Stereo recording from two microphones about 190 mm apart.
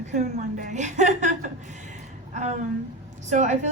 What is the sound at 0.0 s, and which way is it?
A woman's voice, 40° right (ahead or behind).